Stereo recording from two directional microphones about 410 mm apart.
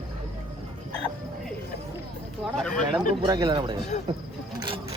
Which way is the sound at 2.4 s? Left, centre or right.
Centre.